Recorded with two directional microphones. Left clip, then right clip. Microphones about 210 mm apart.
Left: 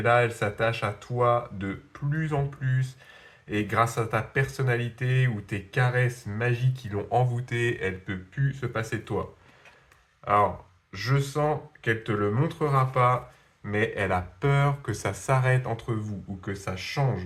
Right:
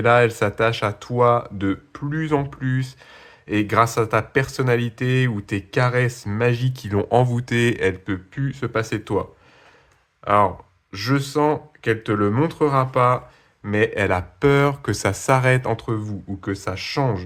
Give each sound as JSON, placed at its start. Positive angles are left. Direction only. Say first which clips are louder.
{"t": 0.0, "sound": "speech", "louder": "right 7 dB", "side_deg": -45}
{"t": 10.2, "sound": "speech", "louder": "right 5 dB", "side_deg": -40}